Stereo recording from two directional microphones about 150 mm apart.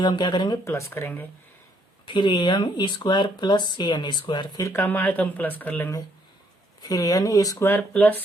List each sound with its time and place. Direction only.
0.0 s speech: 30° left (ahead or behind)
0.6 s speech: 15° left (ahead or behind)
2.0 s speech: 30° left (ahead or behind); by 6.0 s 10° left (ahead or behind)
6.8 s speech: 25° left (ahead or behind)